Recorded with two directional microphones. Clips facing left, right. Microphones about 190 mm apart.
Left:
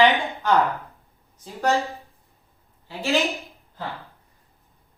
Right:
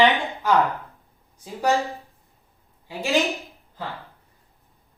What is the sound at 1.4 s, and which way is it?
Speech, 15° right (ahead or behind).